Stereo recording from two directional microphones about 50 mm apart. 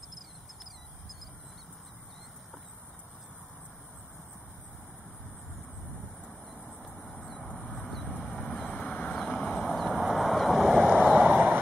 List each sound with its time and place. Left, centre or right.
6.2 s vehicle: centre
7.6 s vehicle: left
9.2 s a sound: left
9.7 s vehicle: centre
10.9 s vehicle: right